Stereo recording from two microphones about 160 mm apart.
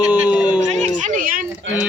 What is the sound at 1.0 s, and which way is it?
Speech, 55° right (ahead or behind).